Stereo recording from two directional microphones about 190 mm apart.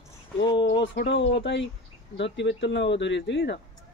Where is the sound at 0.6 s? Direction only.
70° left (ahead or behind).